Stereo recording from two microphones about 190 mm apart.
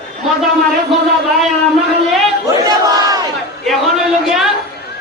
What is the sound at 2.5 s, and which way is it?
Battle cry, 20° right (ahead or behind).